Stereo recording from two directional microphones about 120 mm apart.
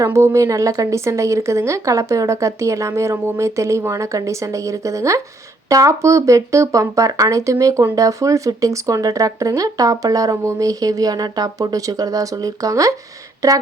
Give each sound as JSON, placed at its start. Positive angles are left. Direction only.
{"t": 0.0, "sound": "speech", "side_deg": -25}